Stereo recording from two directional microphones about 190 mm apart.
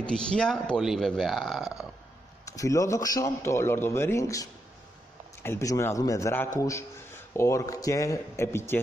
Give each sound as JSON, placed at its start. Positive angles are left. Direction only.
{"t": 0.0, "sound": "speech", "side_deg": 5}
{"t": 2.4, "sound": "a man's voice", "side_deg": 15}